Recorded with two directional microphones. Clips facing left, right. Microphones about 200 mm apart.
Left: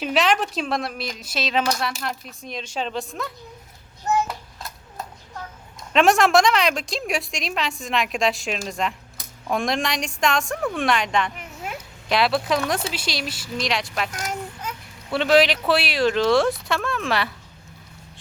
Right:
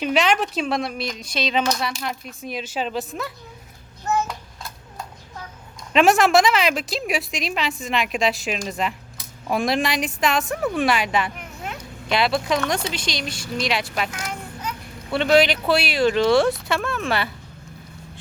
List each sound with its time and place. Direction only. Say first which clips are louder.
0.0 s speech: right 1 dB; centre (ahead or behind)
4.3 s a sound: even; centre (ahead or behind)
5.9 s speech: right 1 dB; centre (ahead or behind)
14.1 s child singing: left 2 dB; 45° left (ahead or behind)
15.1 s speech: even; centre (ahead or behind)